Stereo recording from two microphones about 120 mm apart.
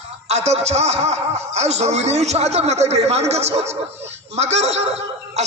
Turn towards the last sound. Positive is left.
turn(degrees=-65)  # may be behind; listen again after turning